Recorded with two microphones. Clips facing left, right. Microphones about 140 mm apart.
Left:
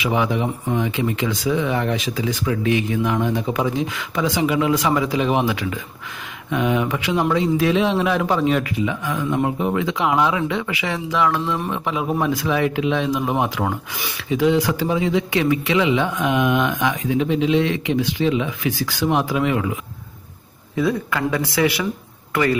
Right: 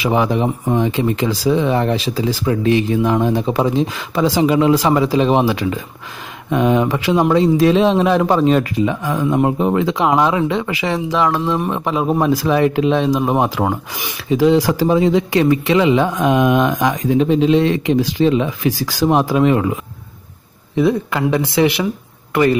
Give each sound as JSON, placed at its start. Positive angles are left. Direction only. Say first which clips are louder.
{"t": 0.0, "sound": "speech", "louder": "right 4 dB", "side_deg": -35}
{"t": 20.7, "sound": "speech", "louder": "right 5 dB", "side_deg": -25}